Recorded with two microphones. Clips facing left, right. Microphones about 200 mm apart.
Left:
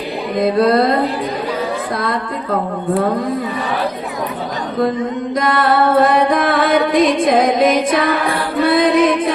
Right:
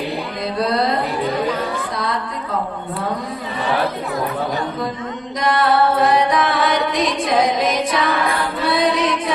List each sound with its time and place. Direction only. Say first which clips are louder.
0.3 s music: left 8 dB; 55° left (ahead or behind)
5.4 s music: left 1 dB; 55° left (ahead or behind)